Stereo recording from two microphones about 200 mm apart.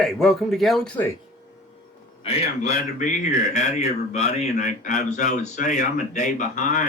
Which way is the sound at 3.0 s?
40° left (ahead or behind).